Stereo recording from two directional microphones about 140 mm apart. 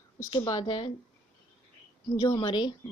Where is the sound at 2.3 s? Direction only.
30° left (ahead or behind).